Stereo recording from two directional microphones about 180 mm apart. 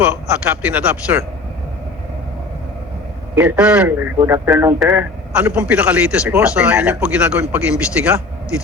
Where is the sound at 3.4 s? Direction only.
10° right (ahead or behind).